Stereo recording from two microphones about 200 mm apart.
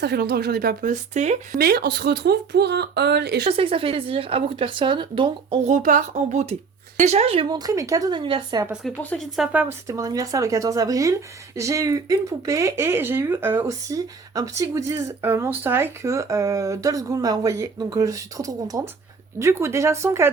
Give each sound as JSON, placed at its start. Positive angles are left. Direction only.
{"t": 0.0, "sound": "speech", "side_deg": -55}
{"t": 1.5, "sound": "speech", "side_deg": -50}
{"t": 3.4, "sound": "speech", "side_deg": -25}
{"t": 5.7, "sound": "speech", "side_deg": -40}
{"t": 8.6, "sound": "speech", "side_deg": -5}